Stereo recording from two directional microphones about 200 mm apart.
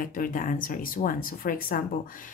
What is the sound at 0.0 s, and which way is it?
Speech, 45° left (ahead or behind).